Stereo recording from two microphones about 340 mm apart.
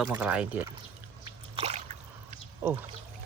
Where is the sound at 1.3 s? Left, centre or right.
Centre.